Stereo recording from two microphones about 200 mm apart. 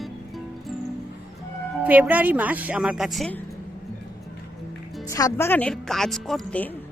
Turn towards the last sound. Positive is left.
turn(degrees=5)  # may be behind; listen again after turning